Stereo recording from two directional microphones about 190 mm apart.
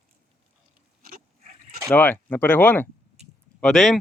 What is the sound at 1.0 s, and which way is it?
Pig, 50° right (ahead or behind).